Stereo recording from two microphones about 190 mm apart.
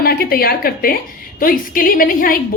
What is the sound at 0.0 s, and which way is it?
A woman's voice, 50° left (ahead or behind).